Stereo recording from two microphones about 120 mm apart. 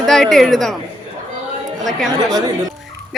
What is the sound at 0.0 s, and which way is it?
Speech, centre (ahead or behind).